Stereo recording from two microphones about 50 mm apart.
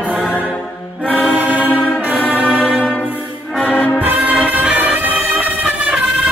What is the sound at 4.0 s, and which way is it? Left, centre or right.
Music, right.